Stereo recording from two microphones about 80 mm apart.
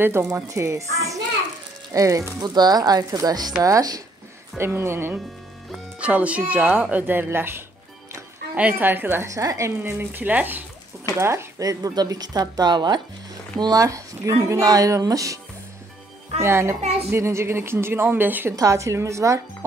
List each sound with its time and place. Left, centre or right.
0.2 s a woman's voice: right
2.4 s a woman's voice: right
4.6 s speech: right
5.9 s speech: centre
9.3 s a woman's voice: right
9.8 s speech: right
11.1 s a woman's voice: right
11.9 s speech: right
13.6 s a woman's voice: right
16.3 s a woman's voice: right
18.6 s a woman's voice: right